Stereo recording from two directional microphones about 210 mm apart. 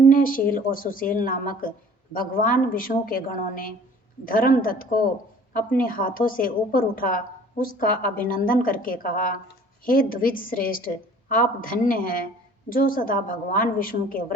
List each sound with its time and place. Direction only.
0.0 s a woman's voice: 40° left (ahead or behind)